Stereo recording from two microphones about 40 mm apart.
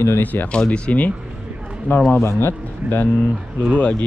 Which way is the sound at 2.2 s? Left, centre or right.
Left.